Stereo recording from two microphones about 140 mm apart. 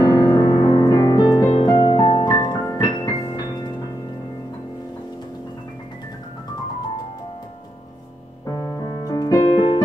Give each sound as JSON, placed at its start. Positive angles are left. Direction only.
{"t": 0.0, "sound": "music", "side_deg": 30}
{"t": 8.5, "sound": "keyboard", "side_deg": 25}